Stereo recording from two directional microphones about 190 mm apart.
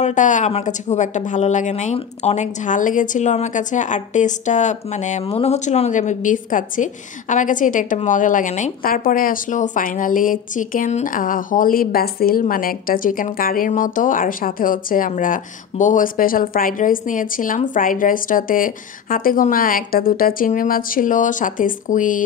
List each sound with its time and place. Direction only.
0.0 s speech: 40° left (ahead or behind)